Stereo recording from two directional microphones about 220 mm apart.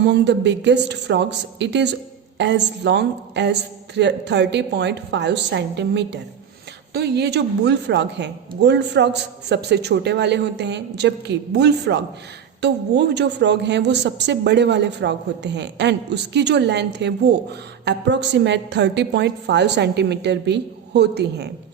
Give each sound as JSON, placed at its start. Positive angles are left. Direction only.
{"t": 0.1, "sound": "speech", "side_deg": -50}